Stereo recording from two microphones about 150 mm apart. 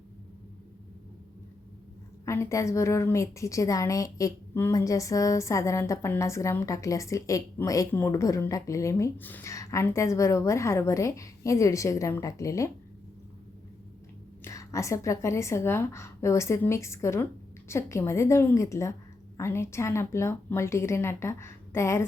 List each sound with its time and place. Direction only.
2.2 s a woman's voice: 20° left (ahead or behind)
14.4 s a woman's voice: 20° left (ahead or behind)